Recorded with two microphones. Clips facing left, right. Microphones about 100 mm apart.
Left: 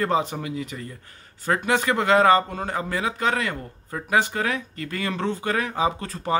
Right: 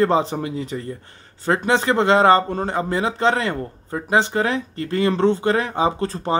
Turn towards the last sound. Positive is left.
turn(degrees=-30)  # may be behind; listen again after turning